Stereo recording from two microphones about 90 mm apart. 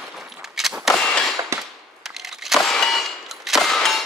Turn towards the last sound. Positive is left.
turn(degrees=5)  # may be behind; listen again after turning